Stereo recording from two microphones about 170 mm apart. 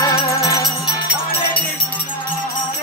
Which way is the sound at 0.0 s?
20° left (ahead or behind).